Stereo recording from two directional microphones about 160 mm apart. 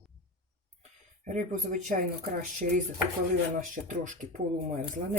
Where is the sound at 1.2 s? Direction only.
50° right (ahead or behind).